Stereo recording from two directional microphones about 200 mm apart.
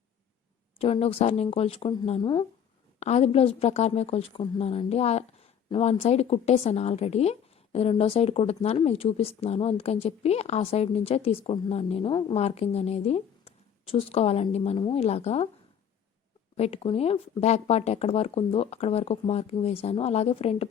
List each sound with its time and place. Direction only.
0.8 s a woman's voice: 30° left (ahead or behind)
16.6 s a woman's voice: 30° left (ahead or behind)